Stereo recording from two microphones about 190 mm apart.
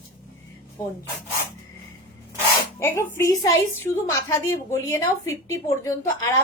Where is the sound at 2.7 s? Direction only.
15° left (ahead or behind).